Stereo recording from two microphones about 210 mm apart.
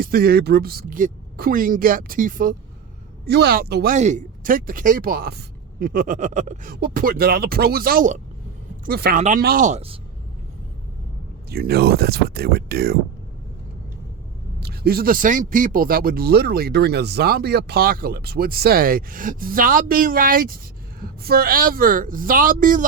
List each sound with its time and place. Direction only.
0.0 s speech: 45° right (ahead or behind)
3.2 s speech: 50° right (ahead or behind)
3.9 s speech: 35° right (ahead or behind)
11.4 s speech: 50° right (ahead or behind)
14.6 s speech: 45° right (ahead or behind)